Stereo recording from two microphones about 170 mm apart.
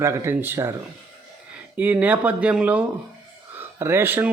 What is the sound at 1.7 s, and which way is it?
Speech, 10° right (ahead or behind).